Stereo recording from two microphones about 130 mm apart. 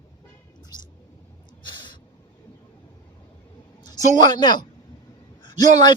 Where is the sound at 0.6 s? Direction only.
35° left (ahead or behind).